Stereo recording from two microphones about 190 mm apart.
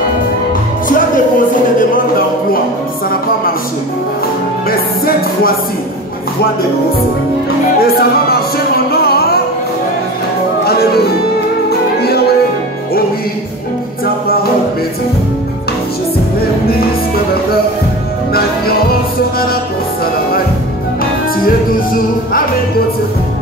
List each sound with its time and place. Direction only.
1.8 s music: 50° left (ahead or behind)
4.6 s music: 50° left (ahead or behind)
7.8 s music: 55° left (ahead or behind)
10.6 s music: 55° left (ahead or behind)
12.0 s music: 55° left (ahead or behind)
14.0 s music: 50° left (ahead or behind)
16.3 s music: 55° left (ahead or behind)
21.5 s music: 50° left (ahead or behind)